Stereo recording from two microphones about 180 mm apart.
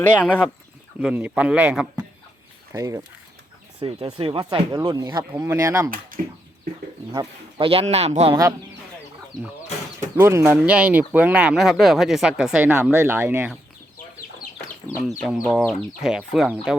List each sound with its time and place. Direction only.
0.0 s speech: 10° left (ahead or behind)
0.9 s speech: 10° right (ahead or behind)
2.7 s speech: 20° right (ahead or behind)
3.8 s speech: 30° right (ahead or behind)
6.1 s a sound: 50° right (ahead or behind)
7.6 s speech: 35° right (ahead or behind)
10.2 s speech: 15° right (ahead or behind)
14.8 s speech: centre (ahead or behind)